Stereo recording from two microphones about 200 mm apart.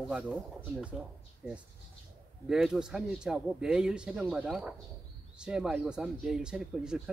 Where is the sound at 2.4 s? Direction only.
5° right (ahead or behind).